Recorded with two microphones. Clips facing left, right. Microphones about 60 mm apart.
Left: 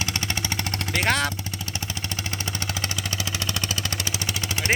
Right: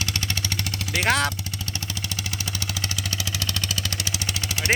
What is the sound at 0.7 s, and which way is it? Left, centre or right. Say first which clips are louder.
Vehicle: left 1 dB; left.